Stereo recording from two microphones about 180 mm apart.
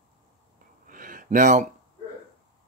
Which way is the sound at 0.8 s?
50° right (ahead or behind).